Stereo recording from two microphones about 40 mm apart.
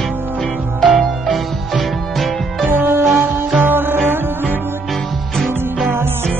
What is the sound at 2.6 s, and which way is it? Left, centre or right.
Music, right.